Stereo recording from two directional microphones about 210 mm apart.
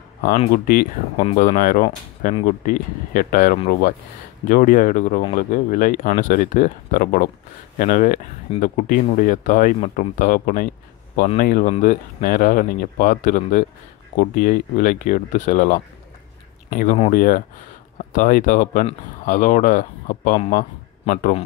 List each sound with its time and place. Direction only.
0.7 s speech: 45° left (ahead or behind)
1.2 s speech: 30° left (ahead or behind)